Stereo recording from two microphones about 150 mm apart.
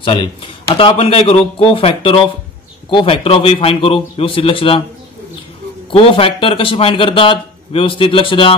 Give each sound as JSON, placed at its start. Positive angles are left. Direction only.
{"t": 0.0, "sound": "speech", "side_deg": 35}
{"t": 5.9, "sound": "speech", "side_deg": 35}